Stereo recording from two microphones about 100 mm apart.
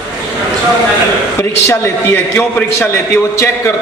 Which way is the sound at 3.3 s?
30° left (ahead or behind).